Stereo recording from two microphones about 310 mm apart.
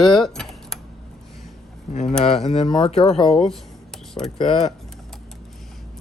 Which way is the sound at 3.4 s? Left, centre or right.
Centre.